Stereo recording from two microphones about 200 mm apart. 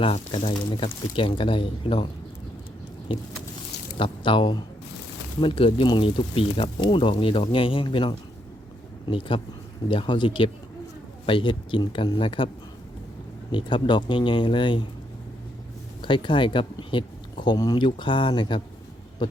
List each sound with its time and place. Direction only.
0.0 s speech: 25° left (ahead or behind)
3.1 s speech: 25° left (ahead or behind)
13.5 s speech: 25° left (ahead or behind)
16.0 s speech: 25° left (ahead or behind)